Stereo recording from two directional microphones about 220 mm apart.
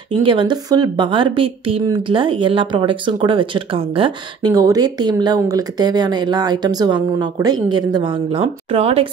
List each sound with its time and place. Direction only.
0.2 s a woman's voice: 20° right (ahead or behind)